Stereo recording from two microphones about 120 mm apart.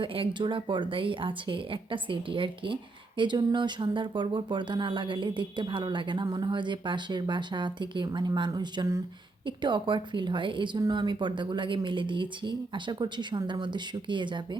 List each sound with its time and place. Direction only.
0.0 s speech: 45° right (ahead or behind)